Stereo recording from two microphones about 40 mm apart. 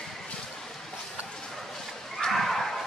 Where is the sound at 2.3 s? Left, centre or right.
Centre.